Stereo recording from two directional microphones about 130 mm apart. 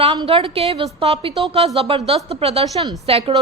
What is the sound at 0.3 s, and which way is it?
Speech, 50° right (ahead or behind).